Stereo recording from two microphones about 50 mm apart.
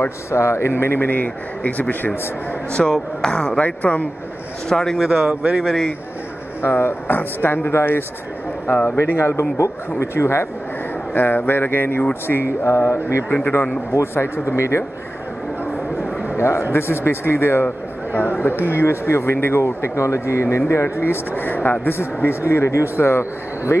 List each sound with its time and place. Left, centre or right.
0.3 s speech: left
2.7 s speech: centre
3.6 s speech: left
4.6 s speech: centre
5.1 s speech: right
5.6 s speech: centre
6.6 s speech: left
11.1 s speech: left
12.6 s speech: left
13.3 s speech: left
14.1 s speech: left
16.3 s speech: left
16.7 s speech: left
21.4 s speech: left